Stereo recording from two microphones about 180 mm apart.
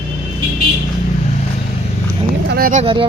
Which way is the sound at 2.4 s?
55° right (ahead or behind).